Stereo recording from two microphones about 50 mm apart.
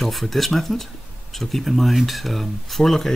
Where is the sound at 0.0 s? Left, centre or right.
Centre.